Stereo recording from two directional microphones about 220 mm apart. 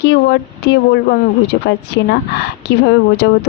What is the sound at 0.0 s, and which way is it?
A woman's voice, 50° left (ahead or behind).